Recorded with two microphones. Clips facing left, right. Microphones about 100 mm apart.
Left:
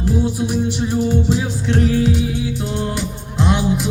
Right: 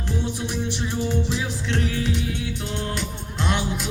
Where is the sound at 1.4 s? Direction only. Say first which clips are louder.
Left 7 dB; 35° left (ahead or behind).